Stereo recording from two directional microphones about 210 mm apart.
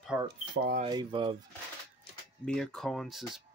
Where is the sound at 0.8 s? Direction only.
20° right (ahead or behind).